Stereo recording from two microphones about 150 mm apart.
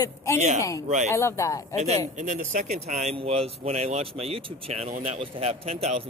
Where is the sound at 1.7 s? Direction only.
45° right (ahead or behind).